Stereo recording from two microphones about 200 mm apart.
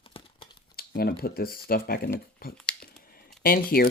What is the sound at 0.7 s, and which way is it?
Speech, 50° left (ahead or behind).